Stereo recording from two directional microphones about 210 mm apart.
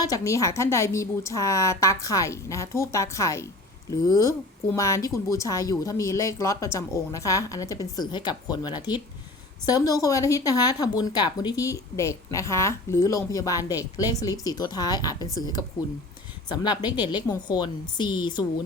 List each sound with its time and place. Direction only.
0.0 s a woman's voice: 15° left (ahead or behind)